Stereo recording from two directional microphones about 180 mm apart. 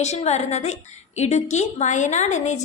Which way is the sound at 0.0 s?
40° left (ahead or behind).